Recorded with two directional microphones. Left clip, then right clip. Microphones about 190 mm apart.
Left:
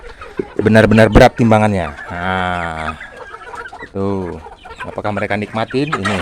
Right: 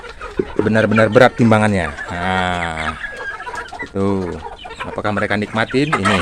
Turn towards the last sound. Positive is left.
turn(degrees=25)  # may be behind; listen again after turning